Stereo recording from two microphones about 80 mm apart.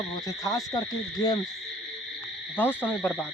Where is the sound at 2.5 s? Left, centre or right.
Left.